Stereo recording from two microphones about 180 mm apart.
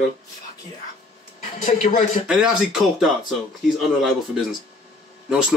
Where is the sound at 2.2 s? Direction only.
5° right (ahead or behind).